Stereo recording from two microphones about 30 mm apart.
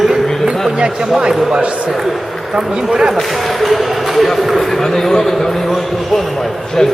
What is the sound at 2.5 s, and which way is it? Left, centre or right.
Speech, right.